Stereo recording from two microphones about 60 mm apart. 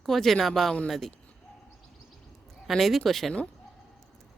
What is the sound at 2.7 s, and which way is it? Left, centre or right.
Speech, centre.